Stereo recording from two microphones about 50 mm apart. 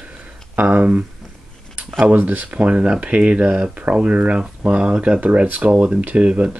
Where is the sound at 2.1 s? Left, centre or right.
Right.